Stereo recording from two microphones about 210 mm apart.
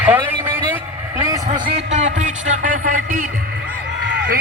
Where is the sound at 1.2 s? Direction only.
15° right (ahead or behind).